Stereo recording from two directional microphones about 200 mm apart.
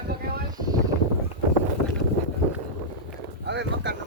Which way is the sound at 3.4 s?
60° right (ahead or behind).